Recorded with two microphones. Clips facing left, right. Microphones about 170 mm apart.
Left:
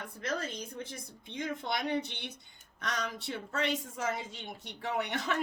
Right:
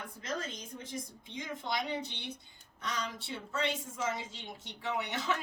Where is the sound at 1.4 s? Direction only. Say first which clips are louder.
Left 2 dB; 60° left (ahead or behind).